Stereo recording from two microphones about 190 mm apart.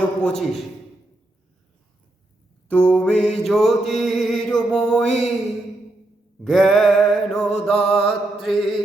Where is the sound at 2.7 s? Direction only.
5° left (ahead or behind).